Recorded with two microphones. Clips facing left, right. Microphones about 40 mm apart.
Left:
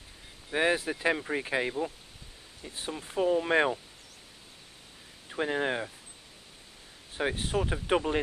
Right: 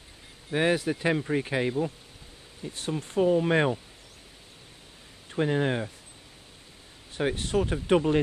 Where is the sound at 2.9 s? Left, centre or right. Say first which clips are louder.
Right 4 dB; centre.